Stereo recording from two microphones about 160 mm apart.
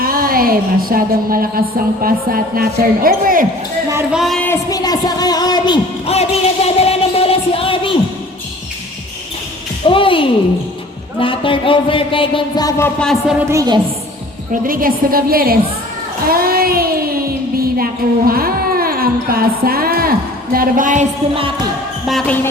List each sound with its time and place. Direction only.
0.0 s a woman's voice: 65° right (ahead or behind)
4.1 s speech: centre (ahead or behind)
4.4 s music: 20° left (ahead or behind)
6.1 s music: 40° left (ahead or behind)
9.8 s a sound: 35° left (ahead or behind)
11.2 s speech: 35° left (ahead or behind)
13.0 s speech: centre (ahead or behind)
13.5 s a woman's voice: 20° right (ahead or behind)
14.5 s a woman's voice: 60° right (ahead or behind)
16.2 s child singing: 65° right (ahead or behind)
18.3 s music: 65° right (ahead or behind)
22.0 s speech: centre (ahead or behind)